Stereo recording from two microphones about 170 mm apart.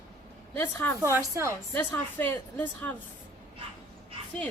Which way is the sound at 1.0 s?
15° right (ahead or behind).